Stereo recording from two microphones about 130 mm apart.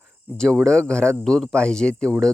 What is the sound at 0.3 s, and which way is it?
Speech, 5° left (ahead or behind).